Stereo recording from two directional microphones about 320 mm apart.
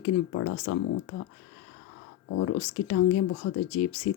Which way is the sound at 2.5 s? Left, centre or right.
Left.